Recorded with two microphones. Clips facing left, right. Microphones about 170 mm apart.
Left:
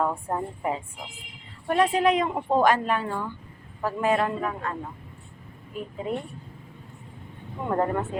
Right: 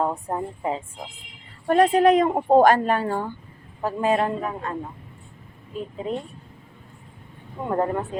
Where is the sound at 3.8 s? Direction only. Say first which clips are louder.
Right 2 dB; 20° right (ahead or behind).